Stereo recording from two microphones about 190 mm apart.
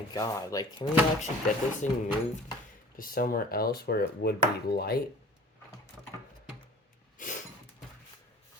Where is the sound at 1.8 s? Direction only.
40° left (ahead or behind).